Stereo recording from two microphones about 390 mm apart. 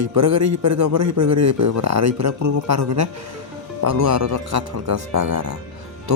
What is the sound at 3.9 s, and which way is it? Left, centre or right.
Speech, right.